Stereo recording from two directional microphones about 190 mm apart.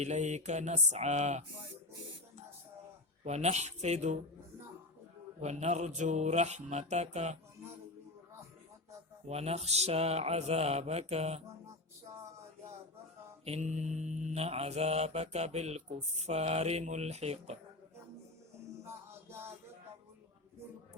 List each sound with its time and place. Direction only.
0.0 s mantra: 35° right (ahead or behind)
3.2 s mantra: 35° right (ahead or behind)
5.4 s mantra: 35° right (ahead or behind)
9.2 s mantra: 35° right (ahead or behind)
13.4 s mantra: 35° right (ahead or behind)
18.8 s music: 15° right (ahead or behind)